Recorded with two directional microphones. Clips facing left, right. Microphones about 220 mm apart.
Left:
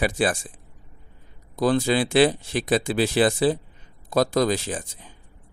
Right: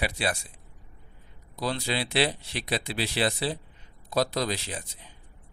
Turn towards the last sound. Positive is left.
turn(degrees=45)  # may be behind; listen again after turning